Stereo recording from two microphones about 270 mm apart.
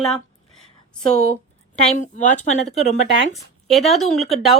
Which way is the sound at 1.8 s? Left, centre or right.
Left.